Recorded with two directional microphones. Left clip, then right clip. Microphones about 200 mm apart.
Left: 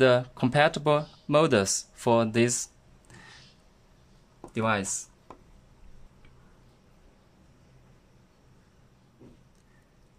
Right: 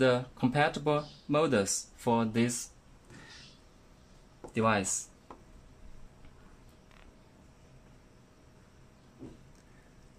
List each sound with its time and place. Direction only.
0.0 s speech: 55° left (ahead or behind)
4.6 s speech: 25° left (ahead or behind)